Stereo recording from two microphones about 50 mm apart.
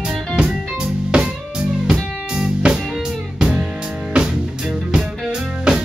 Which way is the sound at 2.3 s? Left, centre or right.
Centre.